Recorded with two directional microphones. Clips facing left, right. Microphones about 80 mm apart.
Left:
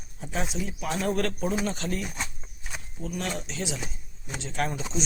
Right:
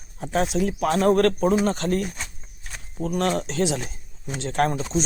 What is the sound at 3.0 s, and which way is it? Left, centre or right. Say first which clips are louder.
Speech: right 9 dB; right.